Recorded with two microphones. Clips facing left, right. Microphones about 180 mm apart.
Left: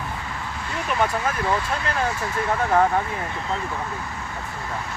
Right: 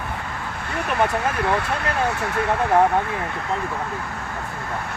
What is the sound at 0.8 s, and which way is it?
Speech, 60° right (ahead or behind).